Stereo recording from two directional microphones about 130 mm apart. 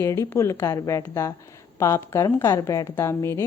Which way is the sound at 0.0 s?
20° left (ahead or behind).